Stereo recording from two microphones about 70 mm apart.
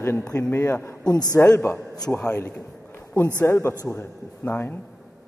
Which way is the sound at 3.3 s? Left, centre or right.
Left.